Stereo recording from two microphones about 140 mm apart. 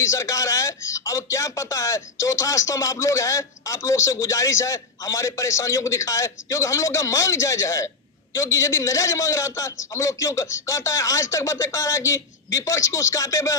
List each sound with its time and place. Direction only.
0.0 s speech: 20° left (ahead or behind)